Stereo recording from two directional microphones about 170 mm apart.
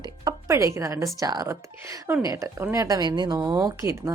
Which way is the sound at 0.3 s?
15° right (ahead or behind).